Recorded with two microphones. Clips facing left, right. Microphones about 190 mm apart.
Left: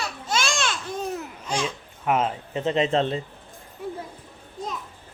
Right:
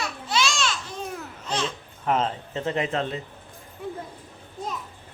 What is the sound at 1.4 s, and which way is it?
Speech, 10° left (ahead or behind).